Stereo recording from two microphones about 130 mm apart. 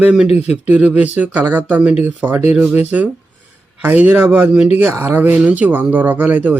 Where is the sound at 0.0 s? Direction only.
5° right (ahead or behind).